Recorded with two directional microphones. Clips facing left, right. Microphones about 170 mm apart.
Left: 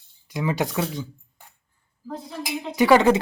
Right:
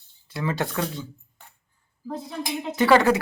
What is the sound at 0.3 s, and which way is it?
Speech, 15° left (ahead or behind).